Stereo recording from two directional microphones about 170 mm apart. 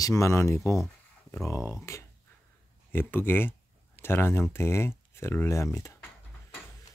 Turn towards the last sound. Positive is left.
turn(degrees=15)  # may be behind; listen again after turning